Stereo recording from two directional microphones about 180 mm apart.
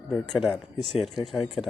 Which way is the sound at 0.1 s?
Centre (ahead or behind).